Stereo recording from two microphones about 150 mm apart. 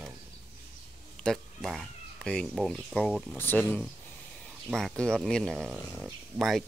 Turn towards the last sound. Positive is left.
turn(degrees=0)  # may be behind; listen again after turning